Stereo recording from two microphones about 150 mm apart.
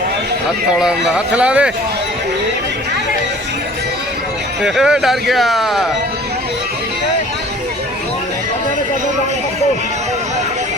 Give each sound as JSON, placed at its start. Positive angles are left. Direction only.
{"t": 0.8, "sound": "a man's voice", "side_deg": -5}
{"t": 4.6, "sound": "speech", "side_deg": -5}